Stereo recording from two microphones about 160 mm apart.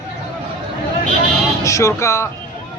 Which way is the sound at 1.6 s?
20° left (ahead or behind).